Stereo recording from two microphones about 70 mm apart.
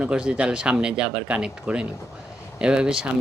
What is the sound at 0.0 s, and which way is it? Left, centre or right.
Speech, centre.